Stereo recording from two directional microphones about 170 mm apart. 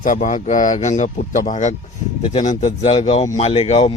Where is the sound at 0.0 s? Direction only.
50° left (ahead or behind).